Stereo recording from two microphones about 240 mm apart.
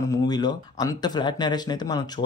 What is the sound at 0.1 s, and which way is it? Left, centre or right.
Speech, centre.